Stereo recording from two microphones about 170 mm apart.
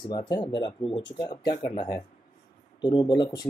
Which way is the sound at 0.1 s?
25° left (ahead or behind).